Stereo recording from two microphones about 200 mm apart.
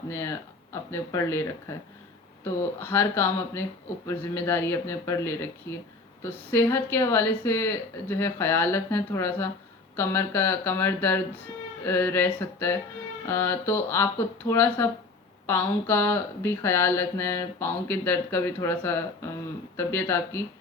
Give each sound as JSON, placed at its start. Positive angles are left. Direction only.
{"t": 0.1, "sound": "speech", "side_deg": 15}